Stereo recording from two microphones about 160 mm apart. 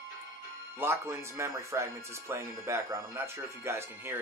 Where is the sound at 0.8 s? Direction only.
15° right (ahead or behind).